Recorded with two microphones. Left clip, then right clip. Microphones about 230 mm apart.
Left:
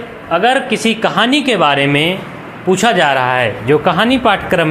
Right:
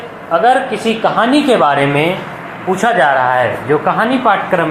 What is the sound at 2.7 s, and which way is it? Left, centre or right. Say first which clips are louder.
Speech: even; left.